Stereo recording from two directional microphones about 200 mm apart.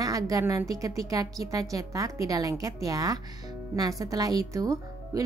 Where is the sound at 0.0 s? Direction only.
15° right (ahead or behind).